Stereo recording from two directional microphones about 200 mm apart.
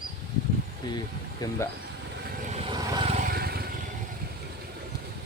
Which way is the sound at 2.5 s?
25° right (ahead or behind).